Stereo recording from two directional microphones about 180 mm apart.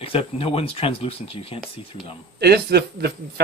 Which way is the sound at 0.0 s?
30° left (ahead or behind).